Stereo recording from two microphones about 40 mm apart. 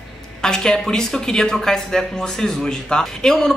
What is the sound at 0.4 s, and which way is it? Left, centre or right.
Speech, centre.